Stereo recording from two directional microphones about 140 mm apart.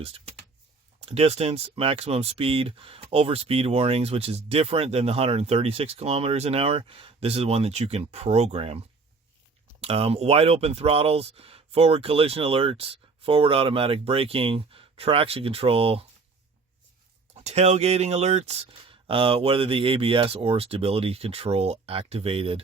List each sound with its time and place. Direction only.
1.0 s speech: 45° right (ahead or behind)
9.8 s speech: 45° right (ahead or behind)
17.3 s speech: 50° right (ahead or behind)